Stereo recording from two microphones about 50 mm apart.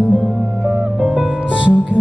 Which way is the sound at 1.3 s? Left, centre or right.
Right.